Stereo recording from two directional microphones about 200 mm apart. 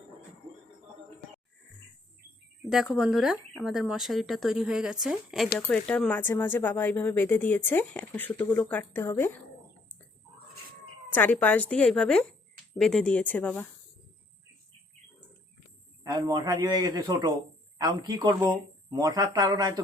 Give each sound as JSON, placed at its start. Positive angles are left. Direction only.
{"t": 2.6, "sound": "speech", "side_deg": 0}
{"t": 11.1, "sound": "speech", "side_deg": 10}
{"t": 16.2, "sound": "speech", "side_deg": -20}